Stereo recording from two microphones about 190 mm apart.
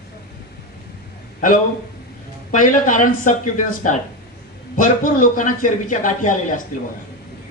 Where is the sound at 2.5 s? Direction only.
45° left (ahead or behind).